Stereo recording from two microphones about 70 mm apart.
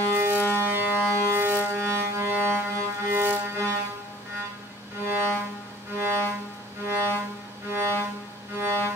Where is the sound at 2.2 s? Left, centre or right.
Right.